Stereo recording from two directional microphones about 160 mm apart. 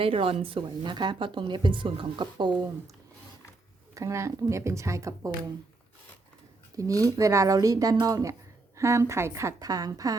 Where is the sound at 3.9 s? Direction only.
20° right (ahead or behind).